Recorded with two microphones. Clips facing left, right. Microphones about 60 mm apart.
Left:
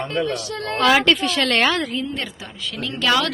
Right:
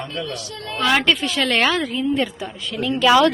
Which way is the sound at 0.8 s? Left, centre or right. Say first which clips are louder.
Left 2 dB; centre.